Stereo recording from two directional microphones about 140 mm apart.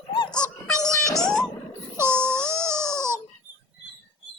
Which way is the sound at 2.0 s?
15° right (ahead or behind).